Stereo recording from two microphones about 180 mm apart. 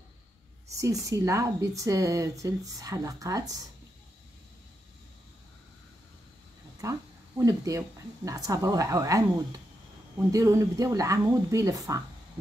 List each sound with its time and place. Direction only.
0.7 s speech: 15° right (ahead or behind)
6.8 s speech: 20° right (ahead or behind)